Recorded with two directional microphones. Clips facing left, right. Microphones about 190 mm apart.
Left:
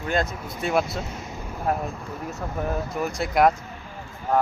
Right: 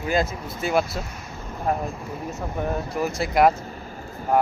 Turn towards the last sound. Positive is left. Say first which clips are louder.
# right 2 dB
turn(degrees=-10)  # may be behind; listen again after turning